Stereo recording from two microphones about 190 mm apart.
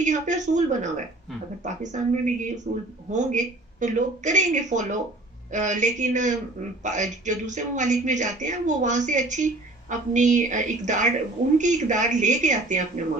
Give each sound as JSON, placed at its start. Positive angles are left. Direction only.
{"t": 0.0, "sound": "speech", "side_deg": -40}
{"t": 2.7, "sound": "speech", "side_deg": -50}
{"t": 3.1, "sound": "speech", "side_deg": -40}